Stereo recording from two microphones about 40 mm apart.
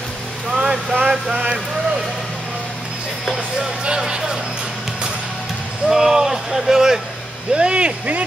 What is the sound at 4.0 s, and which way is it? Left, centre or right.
Music, centre.